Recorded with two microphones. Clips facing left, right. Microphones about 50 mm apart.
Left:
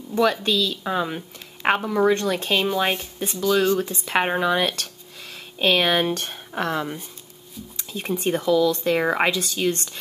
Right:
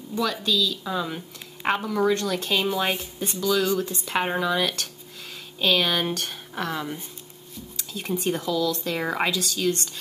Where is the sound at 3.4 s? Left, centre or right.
Left.